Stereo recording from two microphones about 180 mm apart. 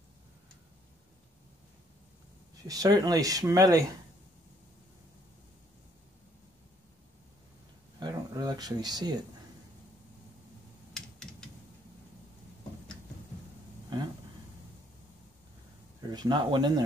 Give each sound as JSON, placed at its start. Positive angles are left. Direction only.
{"t": 2.7, "sound": "speech", "side_deg": -20}
{"t": 8.0, "sound": "a sound", "side_deg": -20}
{"t": 10.9, "sound": "mechanisms", "side_deg": 5}
{"t": 16.1, "sound": "speech", "side_deg": -25}